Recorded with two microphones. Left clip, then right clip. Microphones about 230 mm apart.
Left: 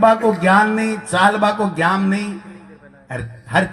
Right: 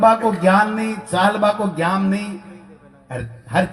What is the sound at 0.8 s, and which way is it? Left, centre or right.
Speech, left.